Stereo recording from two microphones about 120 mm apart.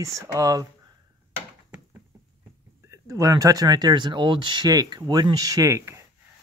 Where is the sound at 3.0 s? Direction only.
30° right (ahead or behind).